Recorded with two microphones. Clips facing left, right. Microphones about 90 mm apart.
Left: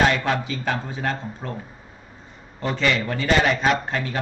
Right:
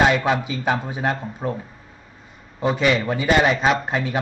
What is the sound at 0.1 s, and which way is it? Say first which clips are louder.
A man's voice: right 3 dB; 15° right (ahead or behind).